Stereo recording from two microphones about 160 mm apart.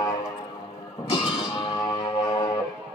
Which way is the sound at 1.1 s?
35° left (ahead or behind).